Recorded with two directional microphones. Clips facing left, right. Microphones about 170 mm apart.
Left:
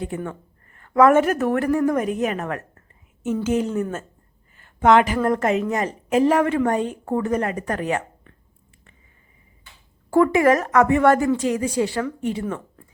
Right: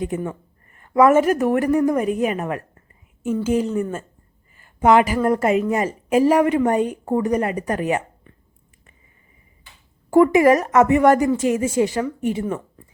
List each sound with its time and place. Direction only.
0.1 s a woman's voice: 20° right (ahead or behind)
3.5 s a woman's voice: centre (ahead or behind)
10.1 s a woman's voice: 15° right (ahead or behind)